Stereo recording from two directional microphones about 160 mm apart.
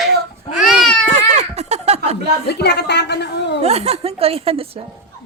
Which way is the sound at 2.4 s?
90° left.